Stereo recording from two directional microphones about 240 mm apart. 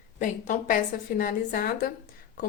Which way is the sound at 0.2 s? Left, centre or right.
Left.